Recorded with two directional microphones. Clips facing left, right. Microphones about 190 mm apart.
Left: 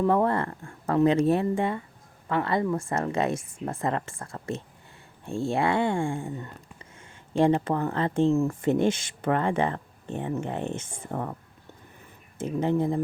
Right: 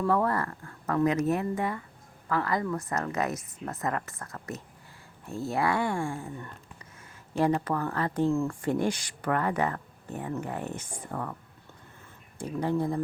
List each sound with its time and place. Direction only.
0.0 s speech: 25° left (ahead or behind)
12.4 s speech: 20° left (ahead or behind)